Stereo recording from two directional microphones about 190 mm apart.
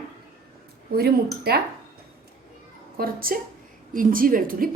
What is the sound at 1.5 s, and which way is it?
Speech, 55° right (ahead or behind).